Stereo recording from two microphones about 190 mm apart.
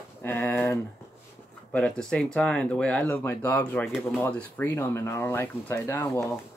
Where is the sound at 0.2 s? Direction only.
10° left (ahead or behind).